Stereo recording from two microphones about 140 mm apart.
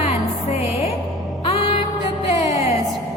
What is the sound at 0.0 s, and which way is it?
Music, 50° left (ahead or behind).